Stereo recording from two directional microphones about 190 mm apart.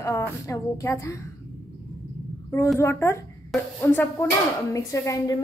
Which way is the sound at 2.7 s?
15° left (ahead or behind).